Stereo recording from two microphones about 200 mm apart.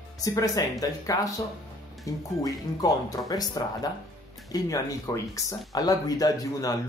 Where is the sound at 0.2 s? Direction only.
20° left (ahead or behind).